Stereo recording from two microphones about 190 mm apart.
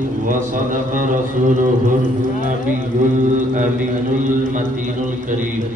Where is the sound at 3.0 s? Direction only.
40° right (ahead or behind).